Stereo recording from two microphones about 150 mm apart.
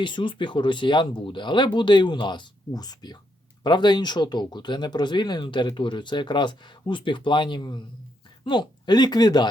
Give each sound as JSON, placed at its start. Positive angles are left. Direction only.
{"t": 0.0, "sound": "speech", "side_deg": 30}